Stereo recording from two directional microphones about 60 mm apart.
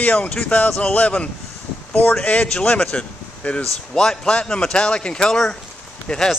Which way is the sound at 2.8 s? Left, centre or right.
Left.